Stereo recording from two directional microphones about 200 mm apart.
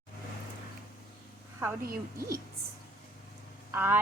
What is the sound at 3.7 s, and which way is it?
Speech, 10° right (ahead or behind).